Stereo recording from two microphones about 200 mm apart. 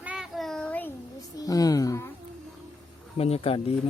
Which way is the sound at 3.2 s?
30° left (ahead or behind).